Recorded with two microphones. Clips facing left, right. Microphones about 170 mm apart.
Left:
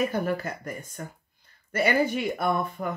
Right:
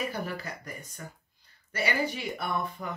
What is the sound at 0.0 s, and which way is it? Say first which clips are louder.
Speech: left 7 dB; 50° left (ahead or behind).